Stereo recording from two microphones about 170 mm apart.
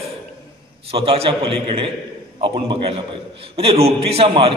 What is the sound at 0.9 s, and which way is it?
A man's voice, 35° right (ahead or behind).